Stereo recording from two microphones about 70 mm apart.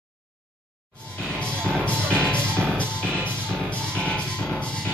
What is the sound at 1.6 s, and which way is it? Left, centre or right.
Music, centre.